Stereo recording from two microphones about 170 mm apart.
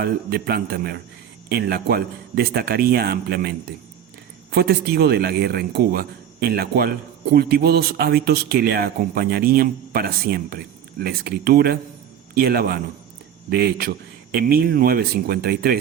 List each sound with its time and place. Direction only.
0.0 s a man's voice: 65° right (ahead or behind)